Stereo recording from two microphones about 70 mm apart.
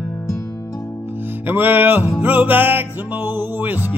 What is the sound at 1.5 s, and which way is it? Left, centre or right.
Music, right.